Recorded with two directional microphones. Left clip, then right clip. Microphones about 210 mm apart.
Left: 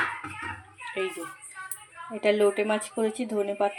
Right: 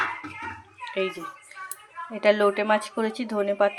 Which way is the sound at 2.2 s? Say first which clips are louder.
Right 2 dB; centre (ahead or behind).